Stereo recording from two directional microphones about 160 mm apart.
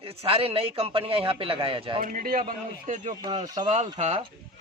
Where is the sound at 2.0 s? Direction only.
60° right (ahead or behind).